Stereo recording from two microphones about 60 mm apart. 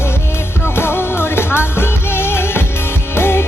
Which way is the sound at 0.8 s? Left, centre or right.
Left.